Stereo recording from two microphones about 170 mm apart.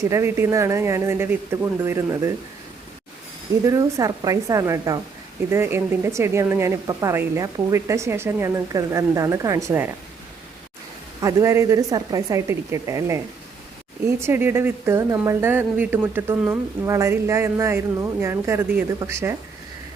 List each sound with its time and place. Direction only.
0.0 s speech: 15° right (ahead or behind)
3.6 s a woman's voice: 20° right (ahead or behind)
11.2 s a woman's voice: 20° right (ahead or behind)